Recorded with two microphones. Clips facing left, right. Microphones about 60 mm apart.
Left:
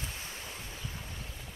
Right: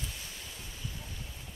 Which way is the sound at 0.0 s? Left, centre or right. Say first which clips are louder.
Left 2 dB; left.